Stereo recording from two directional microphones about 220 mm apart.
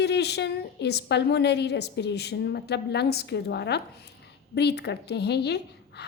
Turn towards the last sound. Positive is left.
turn(degrees=50)  # may be behind; listen again after turning